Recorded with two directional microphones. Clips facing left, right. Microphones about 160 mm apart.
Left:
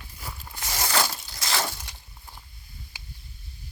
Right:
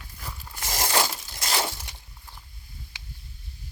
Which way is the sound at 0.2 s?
5° left (ahead or behind).